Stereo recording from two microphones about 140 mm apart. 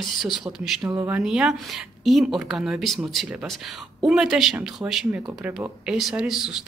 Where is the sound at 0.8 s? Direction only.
20° right (ahead or behind).